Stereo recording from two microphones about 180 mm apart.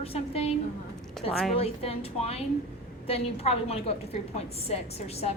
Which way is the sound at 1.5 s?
35° left (ahead or behind).